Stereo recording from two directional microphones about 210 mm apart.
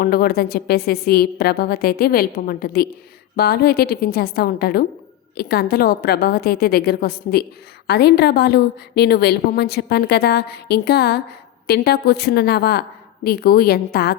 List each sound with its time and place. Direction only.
0.0 s a woman's voice: 45° left (ahead or behind)